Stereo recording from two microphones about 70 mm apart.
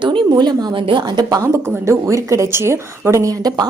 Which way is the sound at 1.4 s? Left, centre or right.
Right.